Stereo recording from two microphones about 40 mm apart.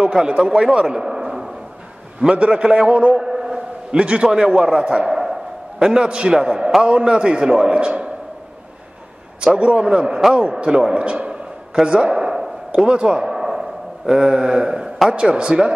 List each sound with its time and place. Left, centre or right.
0.2 s a man's voice: right
2.2 s a man's voice: right
9.4 s a man's voice: right